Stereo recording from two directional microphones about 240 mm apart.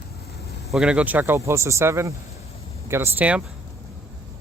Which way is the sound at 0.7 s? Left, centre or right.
Centre.